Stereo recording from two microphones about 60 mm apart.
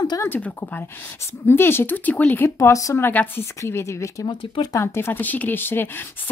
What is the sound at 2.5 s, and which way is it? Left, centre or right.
Speech, left.